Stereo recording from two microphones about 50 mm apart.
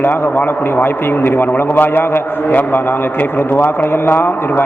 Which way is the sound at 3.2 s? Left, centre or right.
Left.